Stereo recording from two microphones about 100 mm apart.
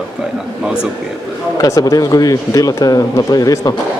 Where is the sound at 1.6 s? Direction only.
35° left (ahead or behind).